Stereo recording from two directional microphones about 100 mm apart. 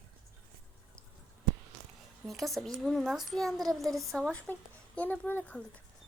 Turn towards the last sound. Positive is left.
turn(degrees=20)  # may be behind; listen again after turning